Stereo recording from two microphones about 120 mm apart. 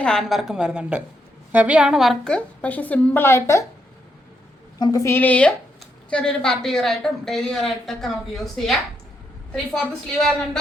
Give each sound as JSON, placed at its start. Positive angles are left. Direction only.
{"t": 0.0, "sound": "a woman's voice", "side_deg": 5}
{"t": 4.8, "sound": "a woman's voice", "side_deg": 30}
{"t": 5.1, "sound": "speech", "side_deg": 10}
{"t": 9.5, "sound": "a woman's voice", "side_deg": 10}